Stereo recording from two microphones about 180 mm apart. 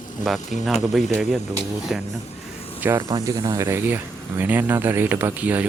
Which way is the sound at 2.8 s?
10° right (ahead or behind).